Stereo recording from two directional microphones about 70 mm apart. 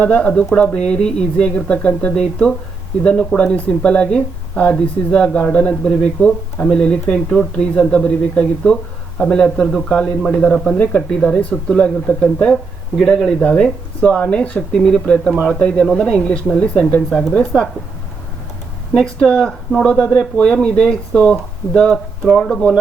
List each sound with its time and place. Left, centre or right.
0.0 s speech: centre
17.5 s speech: centre
18.9 s speech: centre